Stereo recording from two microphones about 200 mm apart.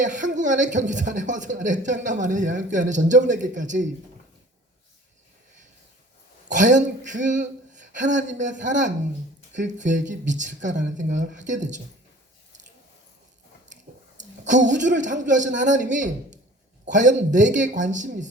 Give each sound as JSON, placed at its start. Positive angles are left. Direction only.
{"t": 0.0, "sound": "speech", "side_deg": -40}
{"t": 6.5, "sound": "speech", "side_deg": -40}
{"t": 14.2, "sound": "speech", "side_deg": -40}